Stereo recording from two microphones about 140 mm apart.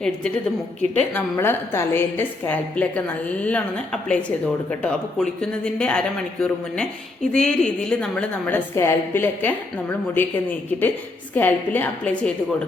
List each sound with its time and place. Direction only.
0.8 s a woman's voice: 10° left (ahead or behind)
4.7 s a woman's voice: 5° left (ahead or behind)
11.3 s a woman's voice: 15° left (ahead or behind)